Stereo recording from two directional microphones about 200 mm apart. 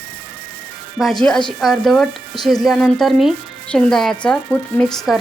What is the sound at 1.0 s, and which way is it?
A woman's voice, centre (ahead or behind).